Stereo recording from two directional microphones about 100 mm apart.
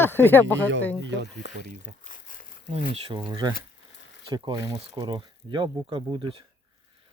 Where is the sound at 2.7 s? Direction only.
90° right.